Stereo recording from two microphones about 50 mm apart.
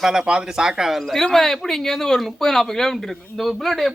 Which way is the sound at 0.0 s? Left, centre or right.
Centre.